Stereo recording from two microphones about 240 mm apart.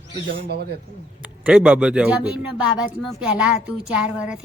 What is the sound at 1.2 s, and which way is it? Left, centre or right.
A woman's voice, centre.